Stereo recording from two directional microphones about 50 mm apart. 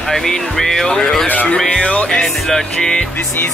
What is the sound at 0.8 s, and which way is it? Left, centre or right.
Speech, left.